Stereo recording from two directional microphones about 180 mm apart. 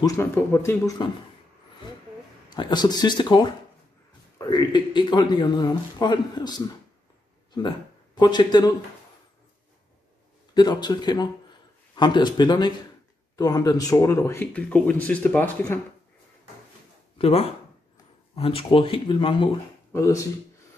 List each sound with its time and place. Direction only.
0.0 s speech: 15° left (ahead or behind)
2.5 s speech: 25° left (ahead or behind)
10.5 s speech: 25° left (ahead or behind)
17.2 s speech: 35° left (ahead or behind)
19.9 s speech: 15° left (ahead or behind)